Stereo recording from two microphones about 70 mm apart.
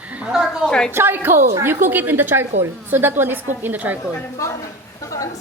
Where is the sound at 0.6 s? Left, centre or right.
Centre.